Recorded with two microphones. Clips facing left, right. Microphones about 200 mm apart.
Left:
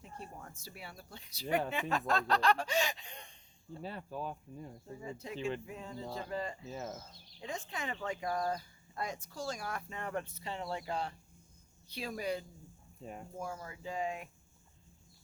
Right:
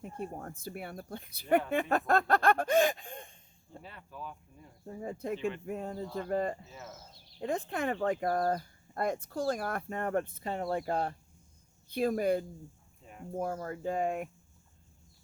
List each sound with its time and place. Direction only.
0.2 s speech: 50° right (ahead or behind)
3.8 s speech: 35° left (ahead or behind)
4.9 s speech: 55° right (ahead or behind)
6.7 s speech: 35° left (ahead or behind)
7.3 s speech: 55° right (ahead or behind)